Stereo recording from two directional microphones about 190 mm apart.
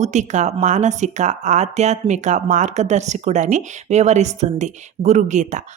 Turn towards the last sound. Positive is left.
turn(degrees=-40)  # may be behind; listen again after turning